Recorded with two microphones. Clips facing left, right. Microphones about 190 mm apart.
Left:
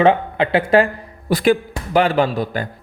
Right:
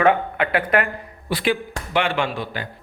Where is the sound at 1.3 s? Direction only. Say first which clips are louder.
Left 7 dB; 45° left (ahead or behind).